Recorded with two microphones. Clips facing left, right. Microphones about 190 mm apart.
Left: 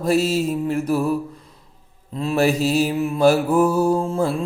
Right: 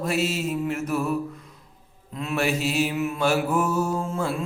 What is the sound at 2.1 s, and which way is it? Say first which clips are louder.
Music: left 6 dB; 30° left (ahead or behind).